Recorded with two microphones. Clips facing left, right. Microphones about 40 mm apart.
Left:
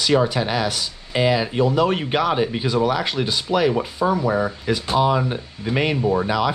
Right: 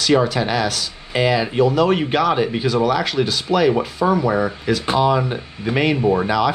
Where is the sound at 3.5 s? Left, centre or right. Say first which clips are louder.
Right 3 dB; centre.